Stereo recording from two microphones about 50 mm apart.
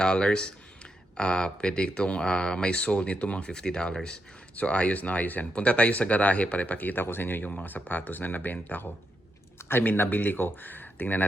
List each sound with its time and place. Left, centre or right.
0.0 s speech: centre
4.5 s speech: left
9.6 s speech: left